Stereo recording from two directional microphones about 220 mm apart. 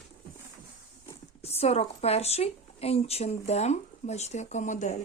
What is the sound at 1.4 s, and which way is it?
Speech, 30° left (ahead or behind).